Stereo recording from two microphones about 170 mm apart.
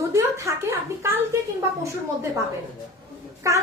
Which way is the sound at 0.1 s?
15° right (ahead or behind).